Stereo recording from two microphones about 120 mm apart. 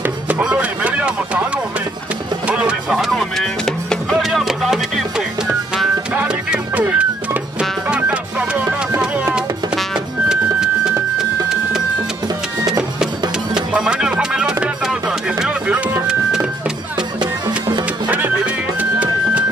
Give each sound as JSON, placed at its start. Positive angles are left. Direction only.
{"t": 0.0, "sound": "music", "side_deg": -10}
{"t": 13.7, "sound": "music", "side_deg": -5}
{"t": 17.2, "sound": "music", "side_deg": -40}
{"t": 18.0, "sound": "music", "side_deg": -10}